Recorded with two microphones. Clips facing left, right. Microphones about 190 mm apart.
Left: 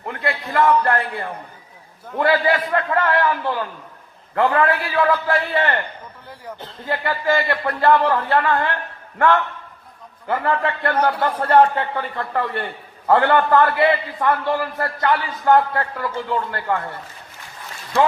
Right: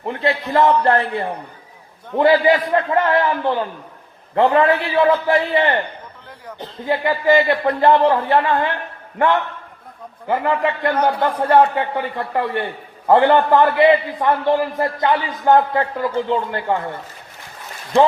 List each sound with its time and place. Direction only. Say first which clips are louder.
0.0 s a man's voice: right 5 dB; 25° right (ahead or behind)